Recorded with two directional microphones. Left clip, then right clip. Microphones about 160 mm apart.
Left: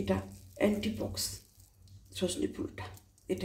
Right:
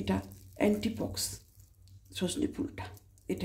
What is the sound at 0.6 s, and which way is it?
Speech, 70° right (ahead or behind).